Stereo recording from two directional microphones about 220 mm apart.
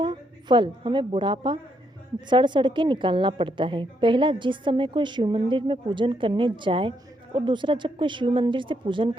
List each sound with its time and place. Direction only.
0.0 s a woman's voice: 20° right (ahead or behind)